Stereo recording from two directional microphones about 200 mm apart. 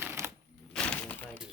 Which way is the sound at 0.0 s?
10° right (ahead or behind).